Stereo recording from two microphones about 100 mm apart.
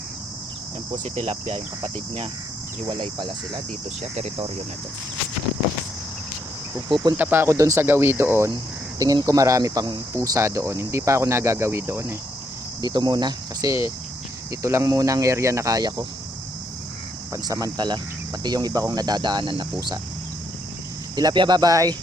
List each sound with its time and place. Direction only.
1.0 s speech: 90° right
2.9 s speech: 50° right (ahead or behind)
6.9 s speech: 45° right (ahead or behind)
7.2 s speech: 20° right (ahead or behind)
9.0 s speech: 35° right (ahead or behind)
12.8 s speech: 45° right (ahead or behind)
17.3 s speech: 35° right (ahead or behind); by 19.6 s 50° right (ahead or behind)
21.2 s speech: 45° right (ahead or behind)